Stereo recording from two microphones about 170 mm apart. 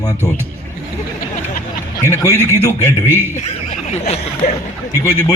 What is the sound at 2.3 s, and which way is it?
A man's voice, 15° right (ahead or behind).